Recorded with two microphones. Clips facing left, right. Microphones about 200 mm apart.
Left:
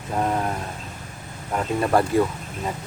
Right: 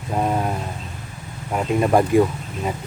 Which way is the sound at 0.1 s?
15° right (ahead or behind).